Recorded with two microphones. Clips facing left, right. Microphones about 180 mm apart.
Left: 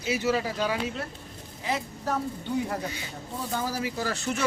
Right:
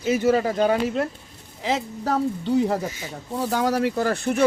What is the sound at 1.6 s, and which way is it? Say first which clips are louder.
Speech: right 6 dB; 90° right.